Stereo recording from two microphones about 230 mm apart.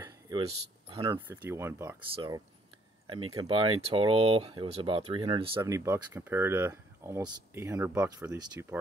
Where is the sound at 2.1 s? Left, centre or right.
Right.